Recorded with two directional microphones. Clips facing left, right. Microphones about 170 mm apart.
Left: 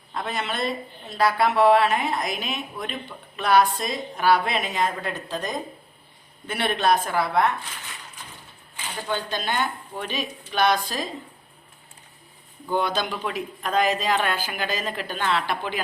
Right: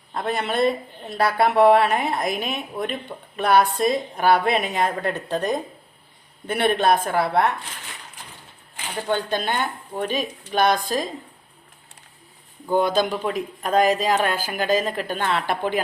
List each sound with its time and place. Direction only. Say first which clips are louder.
0.3 s a woman's voice: right 7 dB; 55° right (ahead or behind)
9.0 s speech: right 4 dB; 55° right (ahead or behind)
12.7 s speech: right 5 dB; 45° right (ahead or behind)